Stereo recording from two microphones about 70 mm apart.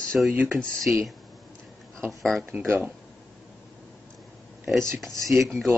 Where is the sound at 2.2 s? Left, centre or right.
Centre.